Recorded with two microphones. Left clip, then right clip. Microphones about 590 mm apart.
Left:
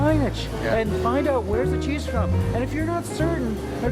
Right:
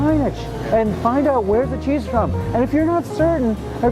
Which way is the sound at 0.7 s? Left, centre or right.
Right.